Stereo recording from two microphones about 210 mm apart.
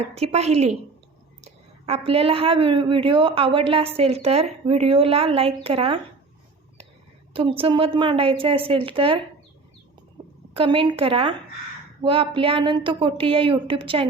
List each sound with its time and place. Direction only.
0.1 s a woman's voice: 30° right (ahead or behind)
7.6 s a woman's voice: 25° right (ahead or behind)
10.5 s a woman's voice: 25° right (ahead or behind)